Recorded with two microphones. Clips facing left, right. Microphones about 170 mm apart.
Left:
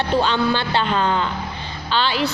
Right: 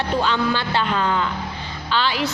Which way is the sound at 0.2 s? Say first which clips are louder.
Left 2 dB; 30° left (ahead or behind).